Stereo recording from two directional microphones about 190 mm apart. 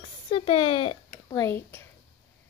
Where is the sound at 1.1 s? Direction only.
15° left (ahead or behind).